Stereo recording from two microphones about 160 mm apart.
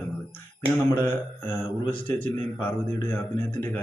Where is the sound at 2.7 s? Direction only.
10° left (ahead or behind).